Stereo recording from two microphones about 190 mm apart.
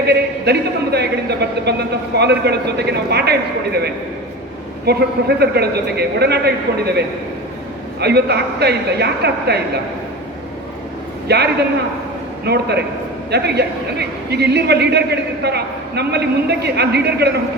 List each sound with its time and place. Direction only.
0.5 s a man's voice: 60° right (ahead or behind)
4.9 s a man's voice: 60° right (ahead or behind)
8.0 s a man's voice: 60° right (ahead or behind)
11.3 s a man's voice: 60° right (ahead or behind)
12.5 s a man's voice: 60° right (ahead or behind)